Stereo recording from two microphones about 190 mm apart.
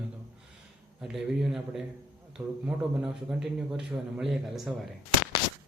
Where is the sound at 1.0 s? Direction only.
Centre (ahead or behind).